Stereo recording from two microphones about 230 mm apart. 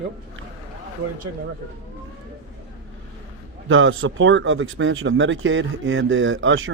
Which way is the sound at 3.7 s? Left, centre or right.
Right.